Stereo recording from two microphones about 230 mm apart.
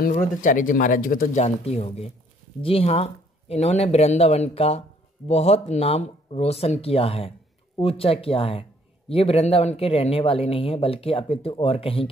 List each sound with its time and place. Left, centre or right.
0.0 s speech: left